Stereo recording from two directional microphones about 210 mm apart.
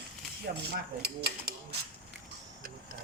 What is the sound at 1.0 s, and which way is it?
Speech, 45° right (ahead or behind).